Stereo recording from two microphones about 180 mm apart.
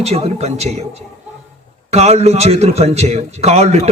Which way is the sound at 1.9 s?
35° right (ahead or behind).